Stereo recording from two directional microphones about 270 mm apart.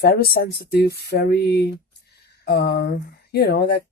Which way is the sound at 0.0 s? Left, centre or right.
Left.